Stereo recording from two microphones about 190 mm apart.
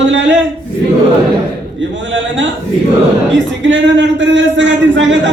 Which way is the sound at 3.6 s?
75° right (ahead or behind).